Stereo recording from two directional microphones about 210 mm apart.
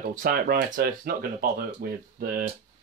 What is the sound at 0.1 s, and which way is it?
Speech, 45° right (ahead or behind).